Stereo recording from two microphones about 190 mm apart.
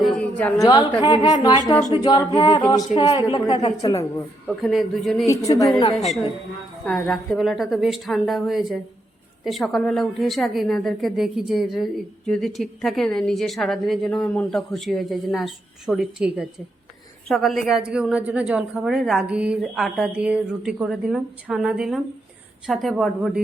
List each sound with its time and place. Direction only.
0.0 s a sound: 5° left (ahead or behind)
0.6 s a woman's voice: 20° left (ahead or behind)
2.9 s a woman's voice: 30° left (ahead or behind)
4.4 s a woman's voice: centre (ahead or behind)
5.3 s a woman's voice: 15° left (ahead or behind)
6.8 s a woman's voice: centre (ahead or behind)